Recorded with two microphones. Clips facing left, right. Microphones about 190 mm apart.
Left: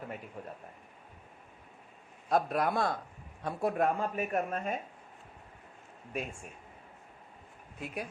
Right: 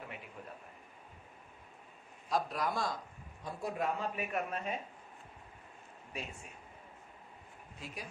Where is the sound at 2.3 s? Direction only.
55° left (ahead or behind).